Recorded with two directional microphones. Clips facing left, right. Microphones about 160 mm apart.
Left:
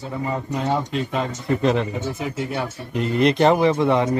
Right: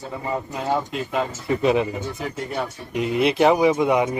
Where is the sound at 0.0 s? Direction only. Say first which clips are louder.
Left 1 dB; centre (ahead or behind).